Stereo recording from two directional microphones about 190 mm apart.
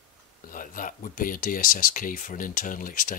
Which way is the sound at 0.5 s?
45° left (ahead or behind).